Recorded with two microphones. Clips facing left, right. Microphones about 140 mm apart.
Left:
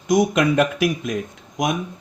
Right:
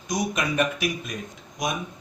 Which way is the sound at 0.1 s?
90° left.